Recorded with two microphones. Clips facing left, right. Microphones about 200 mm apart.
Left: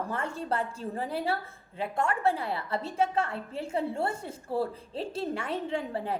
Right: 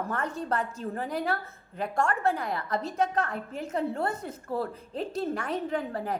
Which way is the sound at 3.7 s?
10° left (ahead or behind).